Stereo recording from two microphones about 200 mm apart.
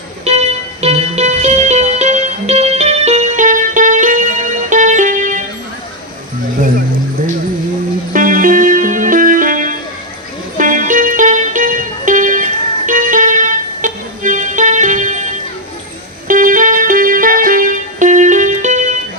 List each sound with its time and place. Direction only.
0.3 s music: 35° right (ahead or behind)
8.1 s music: 40° right (ahead or behind)